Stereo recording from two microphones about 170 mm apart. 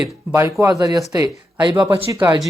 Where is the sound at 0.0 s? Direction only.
10° right (ahead or behind).